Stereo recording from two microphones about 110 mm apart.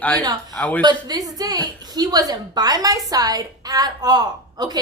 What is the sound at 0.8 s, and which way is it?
A woman's voice, 35° right (ahead or behind).